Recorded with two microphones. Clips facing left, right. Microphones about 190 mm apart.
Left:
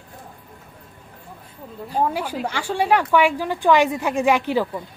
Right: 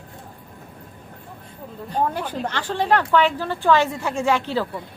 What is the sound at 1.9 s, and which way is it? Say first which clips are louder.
A woman's voice: left 1 dB; 5° left (ahead or behind).